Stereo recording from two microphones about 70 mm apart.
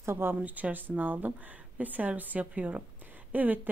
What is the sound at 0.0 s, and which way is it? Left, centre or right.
Speech, right.